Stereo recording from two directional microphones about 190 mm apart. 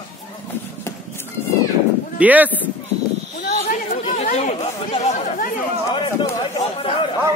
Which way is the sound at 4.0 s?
35° left (ahead or behind).